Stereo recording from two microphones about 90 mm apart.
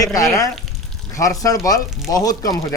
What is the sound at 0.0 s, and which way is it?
Speech, 40° left (ahead or behind).